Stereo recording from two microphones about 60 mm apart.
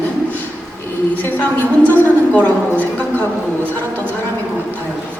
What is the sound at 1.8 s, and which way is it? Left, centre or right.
Speech, left.